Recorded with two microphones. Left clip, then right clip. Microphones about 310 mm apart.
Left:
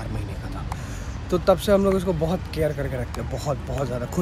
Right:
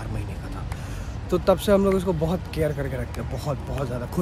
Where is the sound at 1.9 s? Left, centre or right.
Centre.